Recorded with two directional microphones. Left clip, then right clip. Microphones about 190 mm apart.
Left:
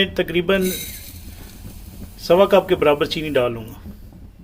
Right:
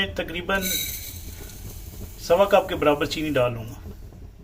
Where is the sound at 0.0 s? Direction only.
30° left (ahead or behind).